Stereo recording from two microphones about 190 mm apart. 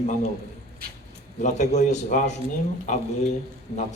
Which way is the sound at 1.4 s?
40° left (ahead or behind).